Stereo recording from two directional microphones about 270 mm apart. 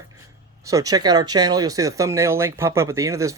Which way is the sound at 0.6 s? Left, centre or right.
Centre.